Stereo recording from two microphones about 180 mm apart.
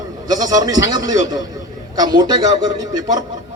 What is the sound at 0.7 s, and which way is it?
Speech, 90° left.